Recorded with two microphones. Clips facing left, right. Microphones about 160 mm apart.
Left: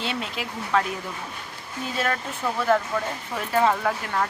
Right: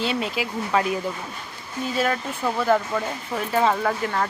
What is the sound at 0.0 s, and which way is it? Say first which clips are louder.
Speech: right 5 dB; 5° right (ahead or behind).